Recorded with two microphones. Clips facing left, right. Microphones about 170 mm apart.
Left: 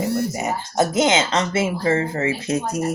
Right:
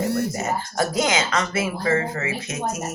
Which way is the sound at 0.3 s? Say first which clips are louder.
Left 3 dB; 20° left (ahead or behind).